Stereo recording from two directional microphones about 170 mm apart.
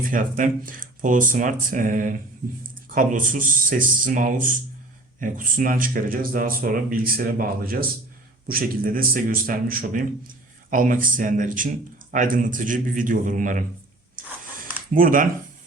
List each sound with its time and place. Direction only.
0.0 s a man's voice: 55° right (ahead or behind)
14.9 s speech: 55° right (ahead or behind)